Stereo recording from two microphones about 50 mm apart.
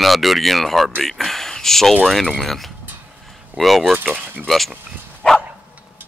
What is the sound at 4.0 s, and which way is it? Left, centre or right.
Speech, right.